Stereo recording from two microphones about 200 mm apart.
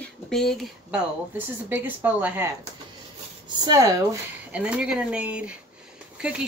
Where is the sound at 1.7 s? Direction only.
10° right (ahead or behind).